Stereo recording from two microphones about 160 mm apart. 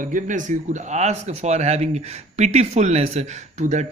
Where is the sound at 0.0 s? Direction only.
55° right (ahead or behind).